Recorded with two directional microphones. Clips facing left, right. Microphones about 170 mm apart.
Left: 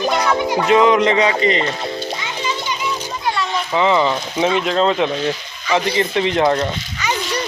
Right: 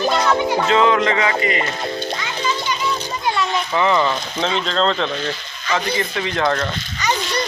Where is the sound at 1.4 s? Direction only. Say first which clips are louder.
Left 4 dB; 25° left (ahead or behind).